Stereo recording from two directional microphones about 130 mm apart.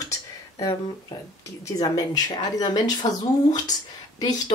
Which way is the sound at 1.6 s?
30° left (ahead or behind).